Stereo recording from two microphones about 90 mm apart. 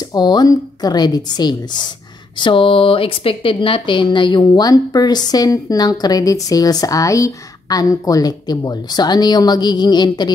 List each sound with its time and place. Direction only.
0.1 s speech: 50° left (ahead or behind)
2.3 s speech: 70° left (ahead or behind)